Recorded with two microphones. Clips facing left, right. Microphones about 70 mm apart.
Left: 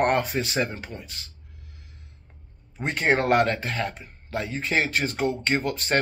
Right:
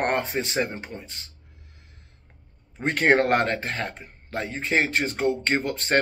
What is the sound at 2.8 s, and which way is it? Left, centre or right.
Speech, right.